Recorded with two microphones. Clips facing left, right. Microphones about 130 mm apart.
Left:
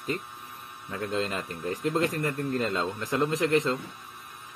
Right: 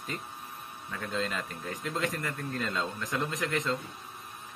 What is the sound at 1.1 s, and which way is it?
A man's voice, 35° left (ahead or behind).